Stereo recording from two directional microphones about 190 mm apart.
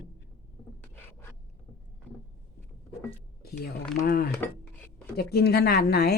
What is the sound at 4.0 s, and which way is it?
Speech, 55° left (ahead or behind).